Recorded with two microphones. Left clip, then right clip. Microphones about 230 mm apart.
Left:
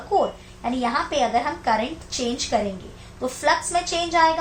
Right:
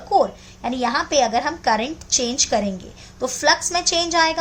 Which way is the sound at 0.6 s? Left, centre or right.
Right.